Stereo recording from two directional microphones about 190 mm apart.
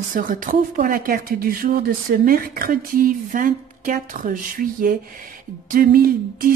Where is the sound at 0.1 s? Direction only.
45° right (ahead or behind).